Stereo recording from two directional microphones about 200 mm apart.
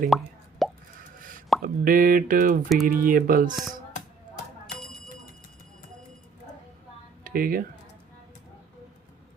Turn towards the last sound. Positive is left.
turn(degrees=-45)  # may be behind; listen again after turning